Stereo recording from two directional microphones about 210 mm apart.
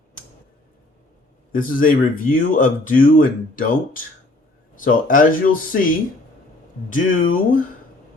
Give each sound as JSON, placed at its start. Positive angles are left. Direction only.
{"t": 1.5, "sound": "speech", "side_deg": 40}